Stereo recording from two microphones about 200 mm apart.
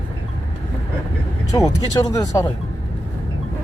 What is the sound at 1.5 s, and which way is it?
Speech, 15° left (ahead or behind).